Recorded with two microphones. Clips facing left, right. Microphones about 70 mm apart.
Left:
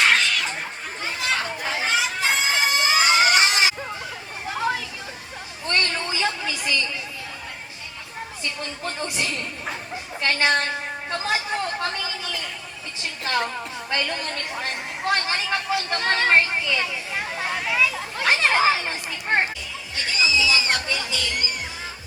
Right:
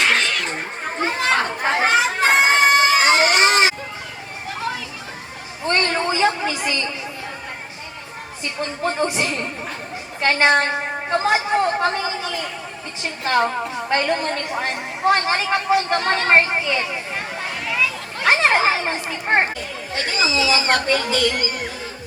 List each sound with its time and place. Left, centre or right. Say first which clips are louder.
0.4 s chatter: right 4 dB; right
5.6 s a sound: right 5 dB; right
8.4 s a woman's voice: right 8 dB; right
17.7 s a sound: right 1 dB; centre
18.2 s chatter: right 3 dB; right
19.1 s a woman's voice: right 3 dB; right